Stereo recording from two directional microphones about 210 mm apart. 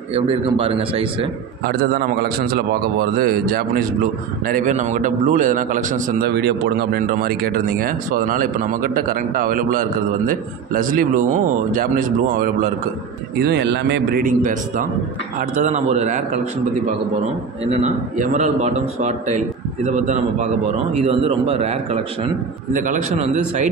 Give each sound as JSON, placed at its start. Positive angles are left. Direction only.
{"t": 0.1, "sound": "a man's voice", "side_deg": -25}
{"t": 1.7, "sound": "a man's voice", "side_deg": -45}
{"t": 6.3, "sound": "speech", "side_deg": -50}
{"t": 13.4, "sound": "a man's voice", "side_deg": -55}
{"t": 14.2, "sound": "speech", "side_deg": -40}
{"t": 17.6, "sound": "speech", "side_deg": -30}